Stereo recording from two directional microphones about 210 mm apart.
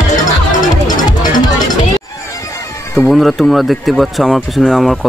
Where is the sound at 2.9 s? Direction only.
Centre (ahead or behind).